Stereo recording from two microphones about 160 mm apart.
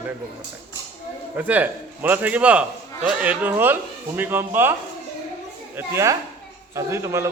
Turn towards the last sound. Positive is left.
turn(degrees=-15)  # may be behind; listen again after turning